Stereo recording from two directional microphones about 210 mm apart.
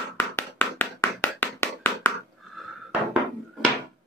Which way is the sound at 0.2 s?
10° left (ahead or behind).